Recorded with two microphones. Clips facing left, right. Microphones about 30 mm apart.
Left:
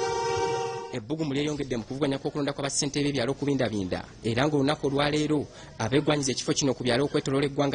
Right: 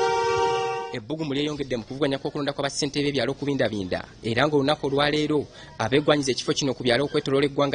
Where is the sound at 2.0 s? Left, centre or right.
Right.